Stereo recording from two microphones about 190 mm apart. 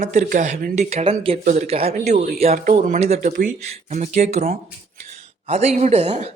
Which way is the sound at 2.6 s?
45° right (ahead or behind).